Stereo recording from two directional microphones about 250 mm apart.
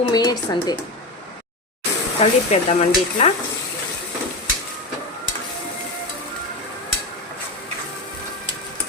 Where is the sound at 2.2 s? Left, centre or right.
Left.